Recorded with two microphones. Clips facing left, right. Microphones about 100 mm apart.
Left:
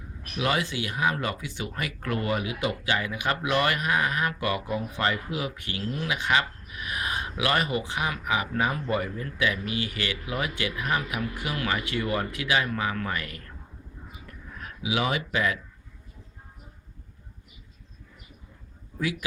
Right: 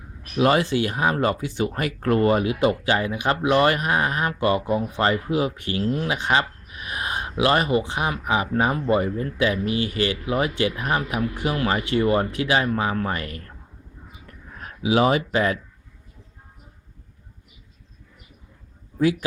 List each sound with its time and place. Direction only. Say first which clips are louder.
0.3 s speech: right 8 dB; 40° right (ahead or behind)
14.5 s speech: right 8 dB; 35° right (ahead or behind)